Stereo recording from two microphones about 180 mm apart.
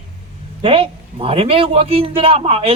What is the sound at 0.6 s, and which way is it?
A man's voice, 30° right (ahead or behind).